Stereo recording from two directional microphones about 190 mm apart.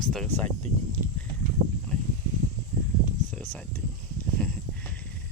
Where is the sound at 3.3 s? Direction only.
10° left (ahead or behind).